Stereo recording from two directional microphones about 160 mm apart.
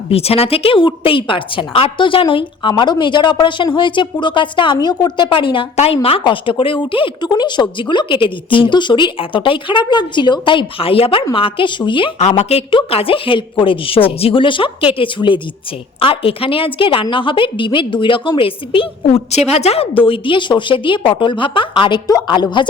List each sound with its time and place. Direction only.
0.1 s a woman's voice: 40° left (ahead or behind)